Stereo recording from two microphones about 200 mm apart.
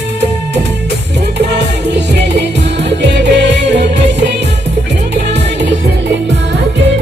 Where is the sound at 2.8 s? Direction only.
60° right (ahead or behind).